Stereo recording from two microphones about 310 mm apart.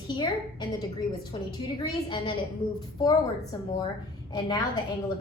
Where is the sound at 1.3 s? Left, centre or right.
Centre.